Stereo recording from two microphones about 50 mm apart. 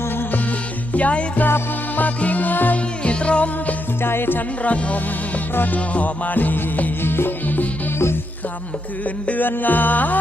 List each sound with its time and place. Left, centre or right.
0.9 s music: left
3.0 s music: left
4.0 s music: left
4.6 s music: left
9.2 s music: left